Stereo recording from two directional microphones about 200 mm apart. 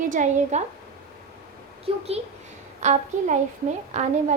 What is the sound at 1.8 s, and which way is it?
Speech, 30° right (ahead or behind).